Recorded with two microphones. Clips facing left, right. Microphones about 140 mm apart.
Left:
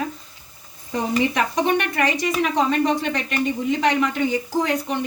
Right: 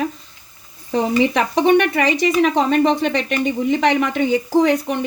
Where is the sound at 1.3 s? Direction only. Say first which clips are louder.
Right 6 dB; 65° right (ahead or behind).